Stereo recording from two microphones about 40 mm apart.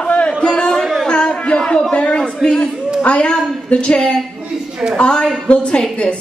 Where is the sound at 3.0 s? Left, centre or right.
Left.